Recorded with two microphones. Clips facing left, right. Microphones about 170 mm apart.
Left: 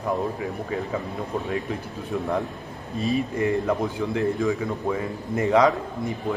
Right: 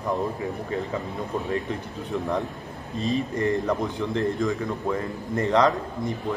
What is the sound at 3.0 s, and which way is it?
A man's voice, 10° left (ahead or behind).